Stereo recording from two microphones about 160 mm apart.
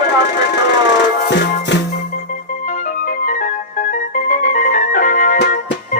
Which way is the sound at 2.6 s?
55° left (ahead or behind).